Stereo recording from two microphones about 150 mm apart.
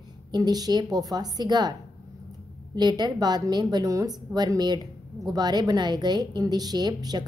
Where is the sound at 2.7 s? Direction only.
30° right (ahead or behind).